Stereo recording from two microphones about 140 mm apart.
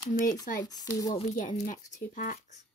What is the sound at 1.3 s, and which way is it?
A woman's voice, 65° left (ahead or behind).